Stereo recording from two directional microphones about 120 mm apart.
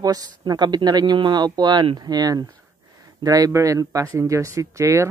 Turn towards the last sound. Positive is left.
turn(degrees=-25)  # may be behind; listen again after turning